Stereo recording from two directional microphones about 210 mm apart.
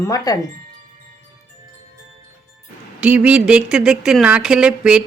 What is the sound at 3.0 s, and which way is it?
Speech, 5° right (ahead or behind).